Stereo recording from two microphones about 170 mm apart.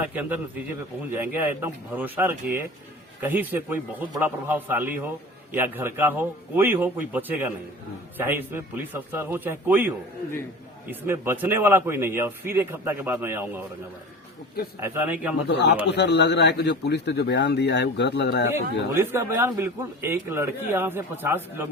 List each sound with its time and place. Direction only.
0.2 s a man's voice: 10° right (ahead or behind)
11.0 s a man's voice: 15° right (ahead or behind)
14.8 s a man's voice: 15° right (ahead or behind)
15.4 s a man's voice: 85° left
18.9 s a man's voice: 15° right (ahead or behind)